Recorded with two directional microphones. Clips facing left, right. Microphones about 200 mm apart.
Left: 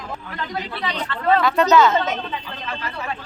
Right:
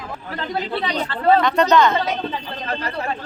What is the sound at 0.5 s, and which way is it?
Speech, 30° right (ahead or behind).